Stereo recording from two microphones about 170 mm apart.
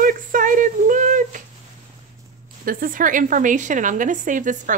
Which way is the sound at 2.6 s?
55° right (ahead or behind).